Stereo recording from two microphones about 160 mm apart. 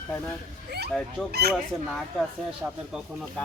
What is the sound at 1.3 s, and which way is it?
Speech, 90° right.